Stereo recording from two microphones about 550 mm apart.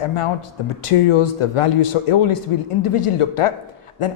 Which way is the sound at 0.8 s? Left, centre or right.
Left.